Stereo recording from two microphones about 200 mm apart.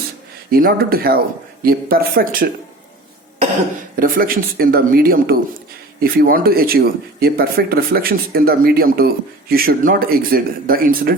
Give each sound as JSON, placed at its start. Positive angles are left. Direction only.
{"t": 0.5, "sound": "speech", "side_deg": -50}
{"t": 3.9, "sound": "speech", "side_deg": -45}